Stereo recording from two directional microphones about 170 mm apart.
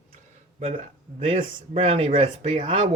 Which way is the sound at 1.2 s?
35° right (ahead or behind).